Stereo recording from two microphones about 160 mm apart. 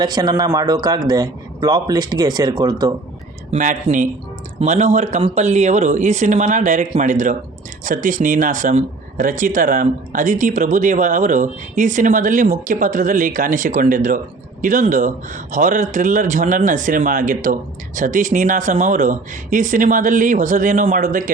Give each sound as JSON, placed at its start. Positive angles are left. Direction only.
{"t": 0.0, "sound": "speech", "side_deg": -25}
{"t": 3.5, "sound": "speech", "side_deg": -45}